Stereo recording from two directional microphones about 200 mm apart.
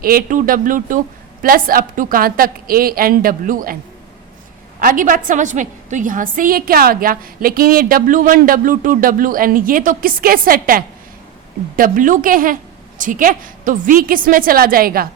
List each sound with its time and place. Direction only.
0.0 s a woman's voice: 45° right (ahead or behind)
4.8 s a woman's voice: 45° right (ahead or behind)